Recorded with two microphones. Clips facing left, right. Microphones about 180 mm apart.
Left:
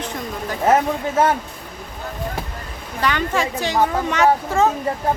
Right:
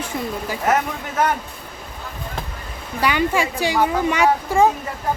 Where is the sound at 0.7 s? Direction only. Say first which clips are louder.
Left 4 dB; 30° left (ahead or behind).